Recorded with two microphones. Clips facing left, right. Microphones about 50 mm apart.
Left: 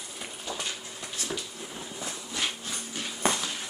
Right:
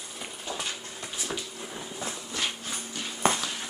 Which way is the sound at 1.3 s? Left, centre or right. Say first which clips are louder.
Right 1 dB; centre.